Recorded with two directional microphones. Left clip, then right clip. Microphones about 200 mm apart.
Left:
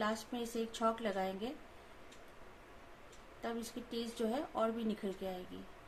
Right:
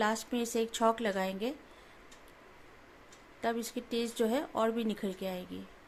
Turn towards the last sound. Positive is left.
turn(degrees=-35)  # may be behind; listen again after turning